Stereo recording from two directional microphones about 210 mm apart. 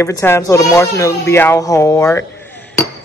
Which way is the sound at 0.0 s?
15° left (ahead or behind).